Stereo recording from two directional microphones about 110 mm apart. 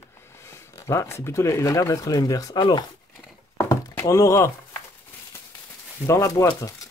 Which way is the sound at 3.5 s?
20° left (ahead or behind).